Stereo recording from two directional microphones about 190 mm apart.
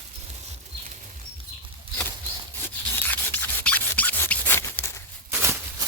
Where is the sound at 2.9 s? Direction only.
10° left (ahead or behind).